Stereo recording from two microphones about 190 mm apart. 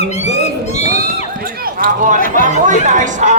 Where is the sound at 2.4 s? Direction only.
40° right (ahead or behind).